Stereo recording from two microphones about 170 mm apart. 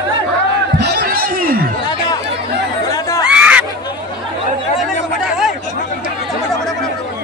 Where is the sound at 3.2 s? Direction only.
5° right (ahead or behind).